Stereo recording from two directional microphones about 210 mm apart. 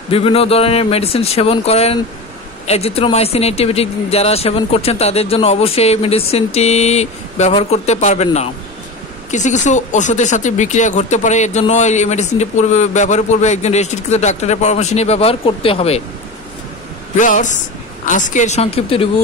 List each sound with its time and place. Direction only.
0.1 s a man's voice: 25° left (ahead or behind)
17.2 s speech: 35° left (ahead or behind)